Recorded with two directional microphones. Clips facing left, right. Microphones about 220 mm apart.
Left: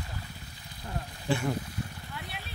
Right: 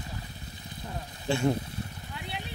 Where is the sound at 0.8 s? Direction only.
25° right (ahead or behind).